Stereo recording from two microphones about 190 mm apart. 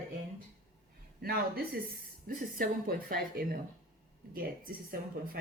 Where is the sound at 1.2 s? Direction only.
55° right (ahead or behind).